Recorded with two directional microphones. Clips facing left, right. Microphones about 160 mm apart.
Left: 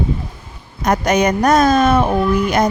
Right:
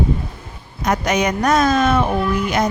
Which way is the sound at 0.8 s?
50° left (ahead or behind).